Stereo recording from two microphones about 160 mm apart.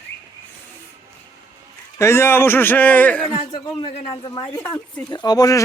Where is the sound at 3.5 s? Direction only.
30° left (ahead or behind).